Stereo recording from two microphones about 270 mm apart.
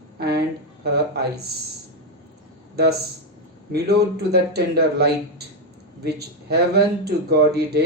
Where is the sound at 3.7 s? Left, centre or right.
Right.